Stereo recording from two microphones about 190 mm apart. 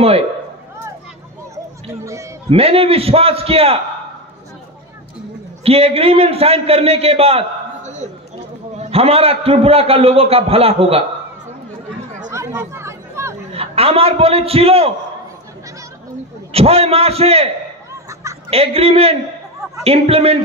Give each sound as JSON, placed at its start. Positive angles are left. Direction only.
{"t": 2.5, "sound": "a man's voice", "side_deg": -30}
{"t": 5.6, "sound": "a man's voice", "side_deg": -30}
{"t": 12.4, "sound": "chatter", "side_deg": -15}
{"t": 13.5, "sound": "a man's voice", "side_deg": -30}
{"t": 16.5, "sound": "a man's voice", "side_deg": -30}
{"t": 18.5, "sound": "a man's voice", "side_deg": -30}